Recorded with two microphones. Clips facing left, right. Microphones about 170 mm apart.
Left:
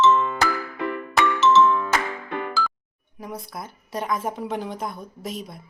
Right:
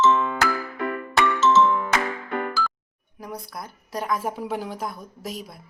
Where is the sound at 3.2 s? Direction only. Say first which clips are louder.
Left 1 dB; centre (ahead or behind).